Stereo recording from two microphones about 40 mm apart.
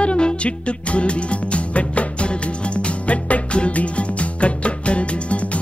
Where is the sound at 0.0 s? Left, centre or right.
Left.